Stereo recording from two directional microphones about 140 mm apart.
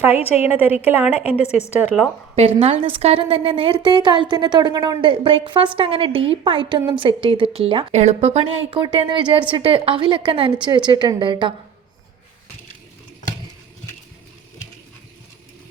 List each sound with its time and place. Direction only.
0.2 s a woman's voice: 45° left (ahead or behind)
0.4 s a woman's voice: 10° right (ahead or behind)
1.2 s a woman's voice: 45° left (ahead or behind)
2.6 s a woman's voice: 50° right (ahead or behind)
7.9 s a woman's voice: 50° right (ahead or behind); by 11.5 s 35° right (ahead or behind)